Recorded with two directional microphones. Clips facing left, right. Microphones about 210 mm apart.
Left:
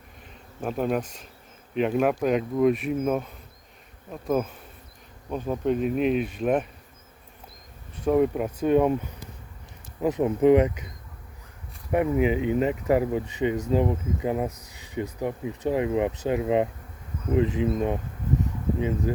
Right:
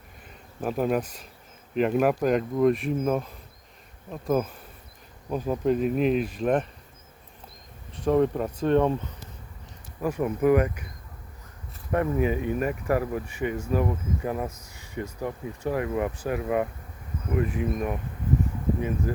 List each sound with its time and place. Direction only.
0.6 s speech: 5° right (ahead or behind)
8.0 s speech: 5° left (ahead or behind)
14.7 s a sound: 15° left (ahead or behind)
15.2 s speech: 20° left (ahead or behind)